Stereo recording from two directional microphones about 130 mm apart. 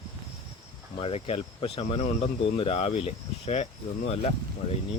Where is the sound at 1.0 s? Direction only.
45° left (ahead or behind).